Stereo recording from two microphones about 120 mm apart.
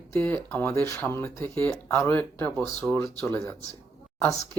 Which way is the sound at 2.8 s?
10° right (ahead or behind).